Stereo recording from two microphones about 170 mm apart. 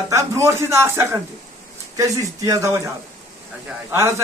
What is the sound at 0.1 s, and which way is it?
Speech, 20° right (ahead or behind).